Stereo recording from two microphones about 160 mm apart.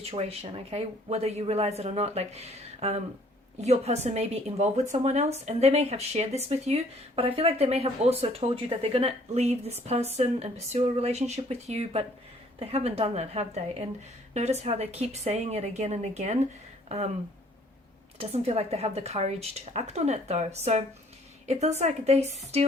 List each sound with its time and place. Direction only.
0.0 s a woman's voice: 40° right (ahead or behind)
18.2 s a woman's voice: 40° right (ahead or behind)